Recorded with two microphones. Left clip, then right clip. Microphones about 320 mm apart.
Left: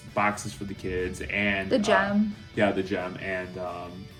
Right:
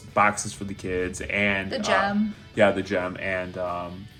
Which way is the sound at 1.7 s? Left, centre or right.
Centre.